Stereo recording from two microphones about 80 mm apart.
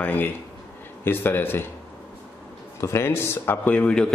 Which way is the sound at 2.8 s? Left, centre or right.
Left.